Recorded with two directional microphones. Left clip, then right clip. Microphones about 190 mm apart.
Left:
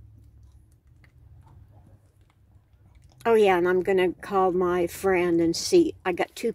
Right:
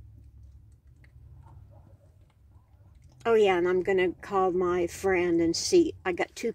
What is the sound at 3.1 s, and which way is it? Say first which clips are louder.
Speech: left 3 dB; 15° left (ahead or behind).